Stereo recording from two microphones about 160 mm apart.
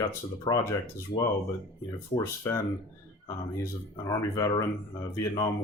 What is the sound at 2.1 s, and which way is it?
Speech, 20° left (ahead or behind).